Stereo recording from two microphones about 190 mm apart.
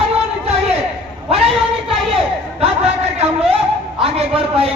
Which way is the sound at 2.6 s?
35° right (ahead or behind).